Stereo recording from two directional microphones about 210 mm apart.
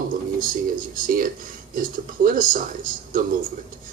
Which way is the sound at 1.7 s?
40° right (ahead or behind).